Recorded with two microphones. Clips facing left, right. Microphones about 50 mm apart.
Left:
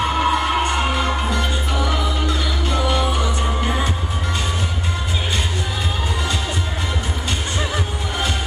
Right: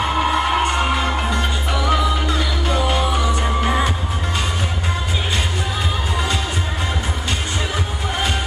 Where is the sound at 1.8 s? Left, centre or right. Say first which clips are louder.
Right 3 dB; right.